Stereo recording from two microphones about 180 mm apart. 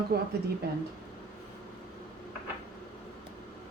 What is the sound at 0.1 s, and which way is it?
Speech, 55° right (ahead or behind).